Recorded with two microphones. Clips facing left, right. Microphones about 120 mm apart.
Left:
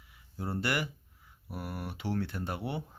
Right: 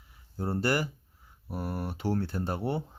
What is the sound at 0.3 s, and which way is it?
Speech, 35° right (ahead or behind).